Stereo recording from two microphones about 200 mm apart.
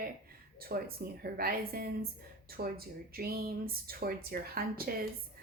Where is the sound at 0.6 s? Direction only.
50° right (ahead or behind).